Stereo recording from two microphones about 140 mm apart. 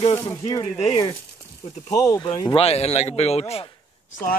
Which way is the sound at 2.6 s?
50° left (ahead or behind).